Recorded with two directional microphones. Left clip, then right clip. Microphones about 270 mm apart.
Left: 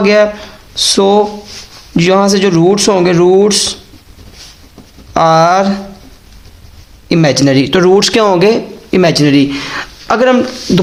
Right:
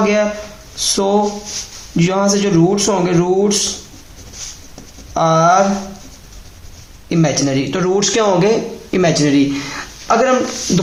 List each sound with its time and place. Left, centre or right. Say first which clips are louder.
0.0 s speech: left 6 dB; left
5.1 s speech: left 4 dB; left
7.1 s speech: left 7 dB; left